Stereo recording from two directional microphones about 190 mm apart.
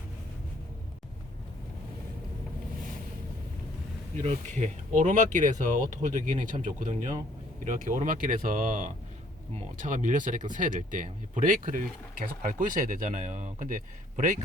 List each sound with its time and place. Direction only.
4.2 s speech: 40° right (ahead or behind)